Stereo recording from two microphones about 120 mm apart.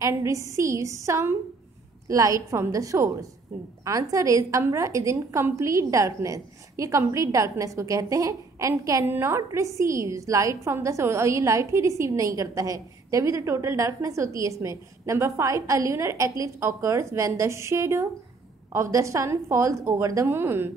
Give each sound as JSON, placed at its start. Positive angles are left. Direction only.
{"t": 0.0, "sound": "a woman's voice", "side_deg": -25}